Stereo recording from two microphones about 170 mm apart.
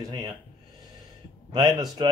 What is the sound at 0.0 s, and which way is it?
Speech, 20° right (ahead or behind).